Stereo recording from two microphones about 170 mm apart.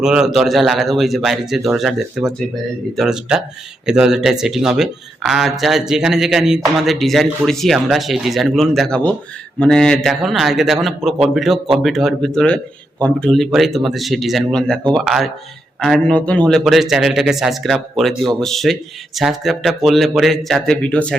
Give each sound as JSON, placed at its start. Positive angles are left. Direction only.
{"t": 0.0, "sound": "speech", "side_deg": -5}